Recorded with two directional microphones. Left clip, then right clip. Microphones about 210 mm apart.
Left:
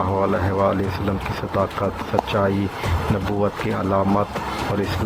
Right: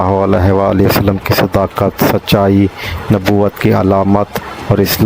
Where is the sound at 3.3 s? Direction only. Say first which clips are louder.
Right 13 dB; 50° right (ahead or behind).